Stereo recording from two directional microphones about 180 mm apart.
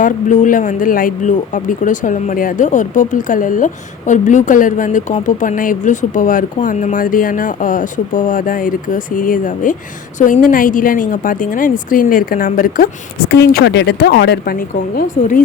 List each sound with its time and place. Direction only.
0.0 s speech: 45° left (ahead or behind)